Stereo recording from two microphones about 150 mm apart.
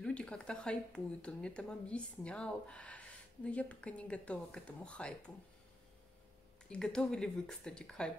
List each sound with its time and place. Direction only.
0.0 s speech: 5° left (ahead or behind)
6.7 s speech: 5° left (ahead or behind)